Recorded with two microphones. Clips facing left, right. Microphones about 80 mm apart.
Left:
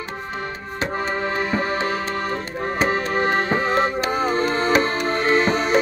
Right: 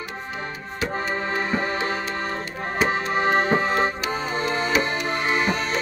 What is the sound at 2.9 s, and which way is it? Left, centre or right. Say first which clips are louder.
Music: right 1 dB; centre.